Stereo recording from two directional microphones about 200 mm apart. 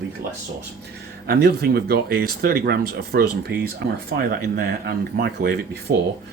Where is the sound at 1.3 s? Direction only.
50° right (ahead or behind).